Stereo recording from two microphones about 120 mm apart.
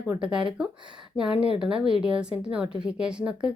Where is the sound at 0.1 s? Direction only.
10° right (ahead or behind).